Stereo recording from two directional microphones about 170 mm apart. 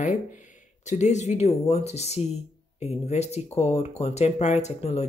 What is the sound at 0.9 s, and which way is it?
Speech, 45° left (ahead or behind).